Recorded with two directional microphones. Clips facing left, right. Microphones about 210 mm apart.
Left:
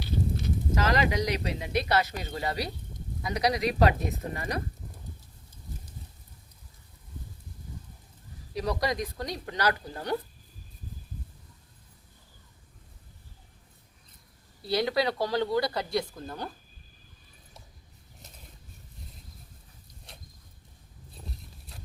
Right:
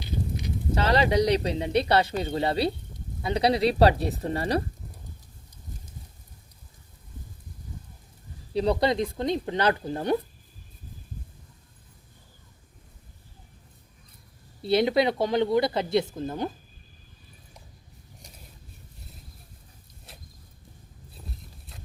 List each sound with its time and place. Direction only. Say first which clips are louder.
0.7 s speech: right 4 dB; 35° right (ahead or behind)
8.5 s speech: right 6 dB; 30° right (ahead or behind)
14.6 s speech: right 5 dB; 25° right (ahead or behind)
20.1 s a sound: right 1 dB; 5° right (ahead or behind)